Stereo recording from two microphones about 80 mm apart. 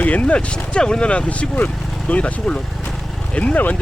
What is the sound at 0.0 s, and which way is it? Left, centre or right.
Speech, centre.